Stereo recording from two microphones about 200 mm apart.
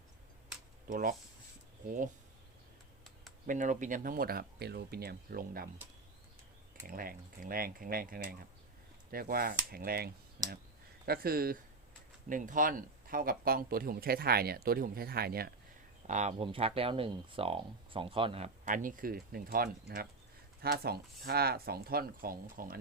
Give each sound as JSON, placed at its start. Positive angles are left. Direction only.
{"t": 0.9, "sound": "speech", "side_deg": -45}
{"t": 3.4, "sound": "speech", "side_deg": -40}
{"t": 6.8, "sound": "speech", "side_deg": -45}
{"t": 16.0, "sound": "speech", "side_deg": -35}